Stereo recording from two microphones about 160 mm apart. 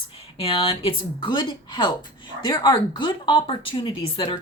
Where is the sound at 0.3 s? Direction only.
35° left (ahead or behind).